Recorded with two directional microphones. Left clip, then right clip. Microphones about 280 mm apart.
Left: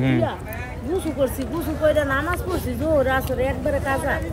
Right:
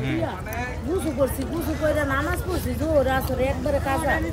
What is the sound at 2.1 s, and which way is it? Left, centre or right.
Speech, centre.